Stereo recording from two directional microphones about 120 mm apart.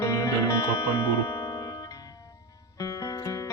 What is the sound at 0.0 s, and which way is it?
Music, 25° left (ahead or behind).